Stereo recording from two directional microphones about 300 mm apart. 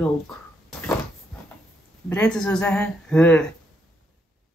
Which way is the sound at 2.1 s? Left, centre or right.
Centre.